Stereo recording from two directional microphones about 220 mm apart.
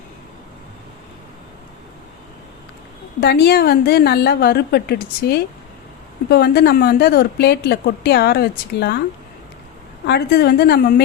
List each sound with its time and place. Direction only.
3.2 s a woman's voice: 50° left (ahead or behind)
10.1 s a woman's voice: 45° left (ahead or behind)